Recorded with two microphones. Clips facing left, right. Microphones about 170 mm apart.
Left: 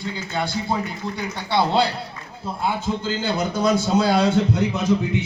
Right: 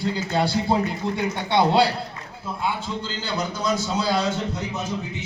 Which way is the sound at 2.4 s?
40° left (ahead or behind).